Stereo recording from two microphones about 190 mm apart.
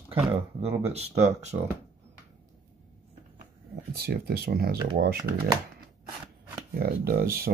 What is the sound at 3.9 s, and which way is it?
Speech, 55° right (ahead or behind).